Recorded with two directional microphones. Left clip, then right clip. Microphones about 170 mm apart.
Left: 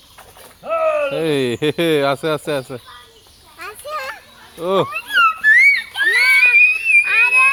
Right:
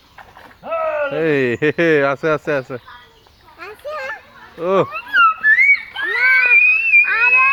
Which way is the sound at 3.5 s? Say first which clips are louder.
Left 1 dB; 35° right (ahead or behind).